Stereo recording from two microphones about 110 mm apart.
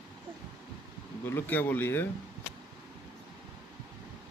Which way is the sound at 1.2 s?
20° left (ahead or behind).